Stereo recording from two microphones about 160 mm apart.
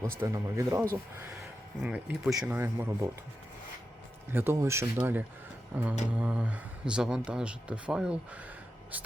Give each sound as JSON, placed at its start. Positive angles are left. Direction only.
{"t": 0.2, "sound": "speech", "side_deg": -15}
{"t": 4.3, "sound": "speech", "side_deg": -15}